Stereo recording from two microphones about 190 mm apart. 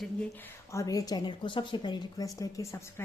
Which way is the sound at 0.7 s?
15° left (ahead or behind).